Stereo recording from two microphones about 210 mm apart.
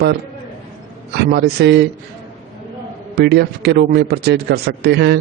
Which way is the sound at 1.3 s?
50° right (ahead or behind).